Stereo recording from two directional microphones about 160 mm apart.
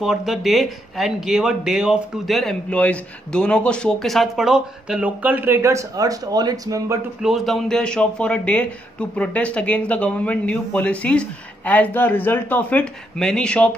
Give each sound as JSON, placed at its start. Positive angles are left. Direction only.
{"t": 0.0, "sound": "speech", "side_deg": 0}
{"t": 7.2, "sound": "speech", "side_deg": 0}